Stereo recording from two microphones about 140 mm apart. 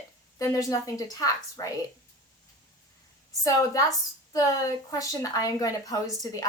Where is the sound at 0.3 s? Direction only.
25° left (ahead or behind).